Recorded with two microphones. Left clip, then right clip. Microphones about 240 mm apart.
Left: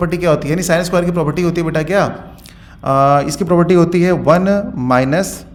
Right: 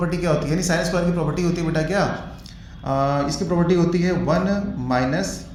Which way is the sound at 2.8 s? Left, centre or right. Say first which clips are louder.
Left 10 dB; left.